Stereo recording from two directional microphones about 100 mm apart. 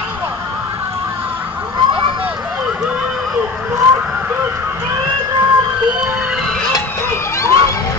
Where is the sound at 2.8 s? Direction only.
10° right (ahead or behind).